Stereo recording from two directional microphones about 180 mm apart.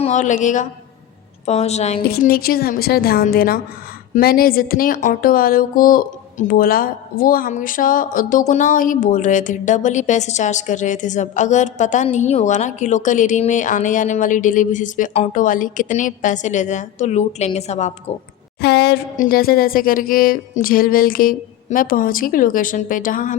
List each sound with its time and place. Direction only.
0.0 s a woman's voice: 40° left (ahead or behind)
2.0 s a woman's voice: 60° left (ahead or behind); by 17.9 s 40° left (ahead or behind)
18.6 s speech: 65° left (ahead or behind); by 23.4 s 50° left (ahead or behind)